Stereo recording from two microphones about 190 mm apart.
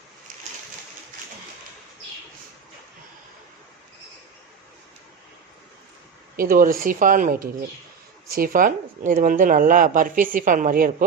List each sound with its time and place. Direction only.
6.3 s speech: 50° right (ahead or behind)